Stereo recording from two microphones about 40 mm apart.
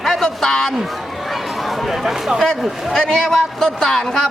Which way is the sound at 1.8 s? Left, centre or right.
Centre.